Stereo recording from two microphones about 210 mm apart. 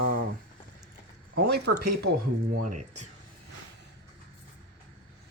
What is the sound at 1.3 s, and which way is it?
Speech, 50° right (ahead or behind).